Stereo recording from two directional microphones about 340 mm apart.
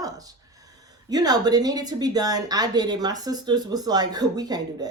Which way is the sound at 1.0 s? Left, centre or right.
Centre.